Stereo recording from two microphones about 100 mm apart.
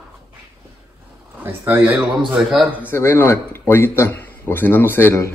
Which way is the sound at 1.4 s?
20° right (ahead or behind).